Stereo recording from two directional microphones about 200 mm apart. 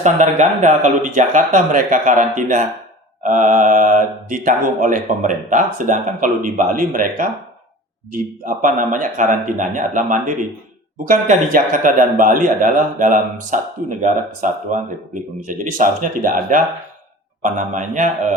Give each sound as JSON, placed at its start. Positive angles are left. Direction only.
{"t": 0.0, "sound": "speech", "side_deg": -35}